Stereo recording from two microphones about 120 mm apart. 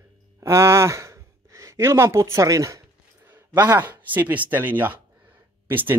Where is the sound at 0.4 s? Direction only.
25° right (ahead or behind).